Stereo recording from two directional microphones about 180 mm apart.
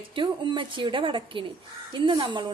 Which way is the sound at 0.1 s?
25° right (ahead or behind).